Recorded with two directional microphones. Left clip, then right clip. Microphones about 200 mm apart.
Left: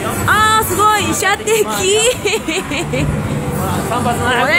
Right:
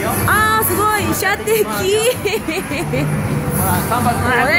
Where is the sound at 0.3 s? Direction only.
5° right (ahead or behind).